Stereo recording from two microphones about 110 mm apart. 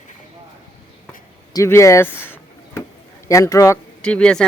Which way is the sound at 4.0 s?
10° left (ahead or behind).